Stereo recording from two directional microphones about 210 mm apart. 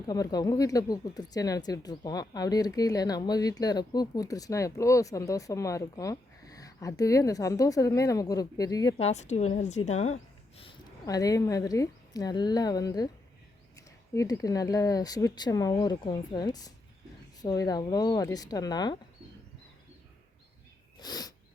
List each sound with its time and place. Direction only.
0.1 s speech: 20° left (ahead or behind)
9.0 s a woman's voice: 30° left (ahead or behind)
10.6 s a woman's voice: 20° left (ahead or behind)
21.0 s sneeze: 20° left (ahead or behind)